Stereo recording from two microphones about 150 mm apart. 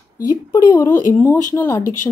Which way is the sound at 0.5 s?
25° left (ahead or behind).